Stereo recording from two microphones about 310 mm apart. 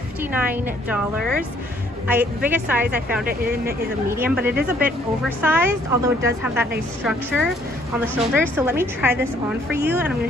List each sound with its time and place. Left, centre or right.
0.2 s a woman's voice: centre
3.3 s speech: right
4.1 s a woman's voice: centre